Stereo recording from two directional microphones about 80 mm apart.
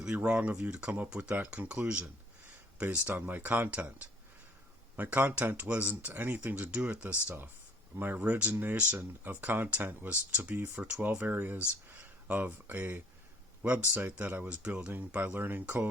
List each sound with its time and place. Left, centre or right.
0.0 s speech: centre; by 15.9 s right